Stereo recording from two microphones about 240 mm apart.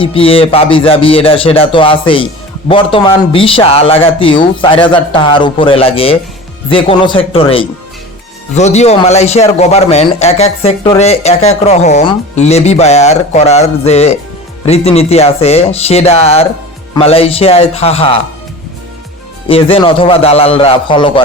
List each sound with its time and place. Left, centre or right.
0.0 s a man's voice: left
19.5 s a man's voice: left